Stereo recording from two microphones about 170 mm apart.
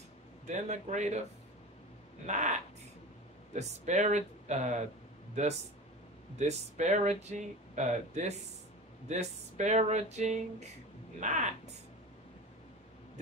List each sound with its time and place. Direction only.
0.5 s speech: 45° right (ahead or behind)
2.2 s speech: 45° right (ahead or behind)
3.5 s speech: 45° right (ahead or behind)